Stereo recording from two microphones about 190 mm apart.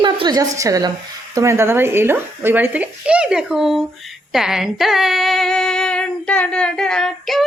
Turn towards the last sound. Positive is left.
turn(degrees=0)  # may be behind; listen again after turning